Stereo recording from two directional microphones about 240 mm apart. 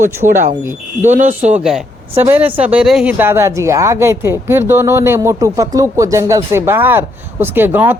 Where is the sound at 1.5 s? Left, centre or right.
Centre.